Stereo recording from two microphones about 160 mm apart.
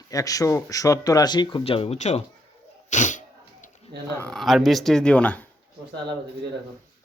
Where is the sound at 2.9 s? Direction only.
50° left (ahead or behind).